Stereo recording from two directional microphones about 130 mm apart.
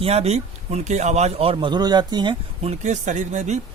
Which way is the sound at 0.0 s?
50° right (ahead or behind).